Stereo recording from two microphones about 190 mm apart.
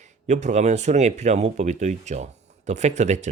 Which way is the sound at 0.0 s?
40° right (ahead or behind).